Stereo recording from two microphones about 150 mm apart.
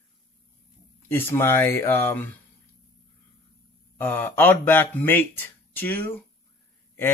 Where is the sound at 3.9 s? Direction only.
15° left (ahead or behind).